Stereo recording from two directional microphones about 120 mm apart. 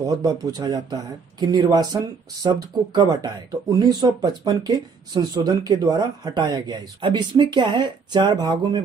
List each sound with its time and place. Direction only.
0.0 s speech: 30° right (ahead or behind)